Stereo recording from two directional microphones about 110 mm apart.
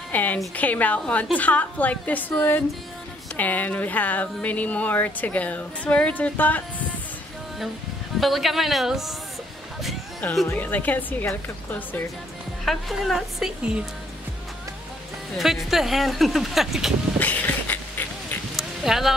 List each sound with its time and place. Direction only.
0.1 s a woman's voice: 15° left (ahead or behind)
8.2 s speech: centre (ahead or behind)
10.5 s speech: 15° left (ahead or behind)
12.6 s speech: centre (ahead or behind)
15.3 s speech: centre (ahead or behind)
17.2 s a sound: 15° left (ahead or behind)
18.6 s a sound: centre (ahead or behind)